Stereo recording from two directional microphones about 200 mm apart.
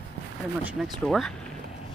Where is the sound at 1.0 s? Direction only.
5° left (ahead or behind).